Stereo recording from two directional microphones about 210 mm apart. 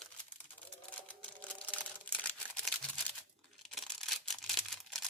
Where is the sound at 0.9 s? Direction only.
5° left (ahead or behind).